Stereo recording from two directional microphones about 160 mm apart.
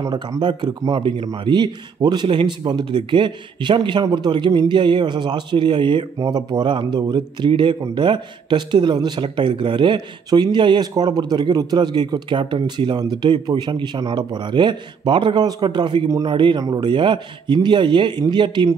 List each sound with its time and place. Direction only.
0.0 s speech: 25° right (ahead or behind)